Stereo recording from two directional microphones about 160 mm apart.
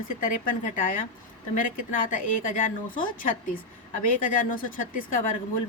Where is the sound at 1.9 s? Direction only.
60° left (ahead or behind).